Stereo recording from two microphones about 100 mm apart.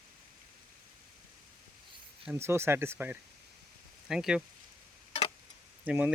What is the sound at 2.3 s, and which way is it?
Speech, 25° right (ahead or behind).